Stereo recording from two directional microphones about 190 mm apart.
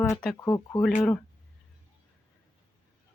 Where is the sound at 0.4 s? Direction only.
15° left (ahead or behind).